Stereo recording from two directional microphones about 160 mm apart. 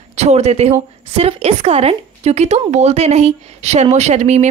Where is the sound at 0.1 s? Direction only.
45° right (ahead or behind).